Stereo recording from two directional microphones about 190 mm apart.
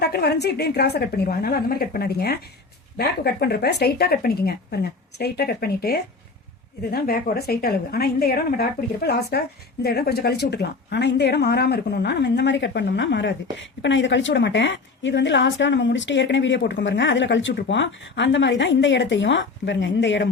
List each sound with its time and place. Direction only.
0.0 s speech: 55° left (ahead or behind)
9.8 s speech: 55° left (ahead or behind); by 20.2 s 75° left (ahead or behind)